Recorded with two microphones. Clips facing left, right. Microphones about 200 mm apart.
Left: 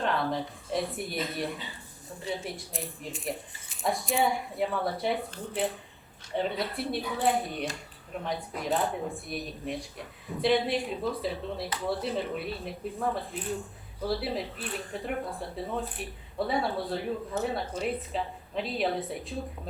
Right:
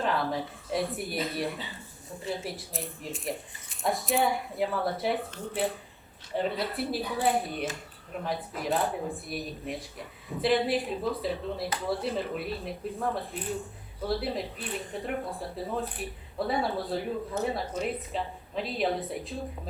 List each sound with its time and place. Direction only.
0.0 s speech: centre (ahead or behind)
6.3 s speech: centre (ahead or behind)